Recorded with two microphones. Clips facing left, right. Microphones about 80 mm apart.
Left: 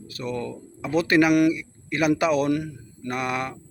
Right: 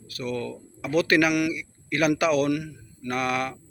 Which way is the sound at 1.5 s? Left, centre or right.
Left.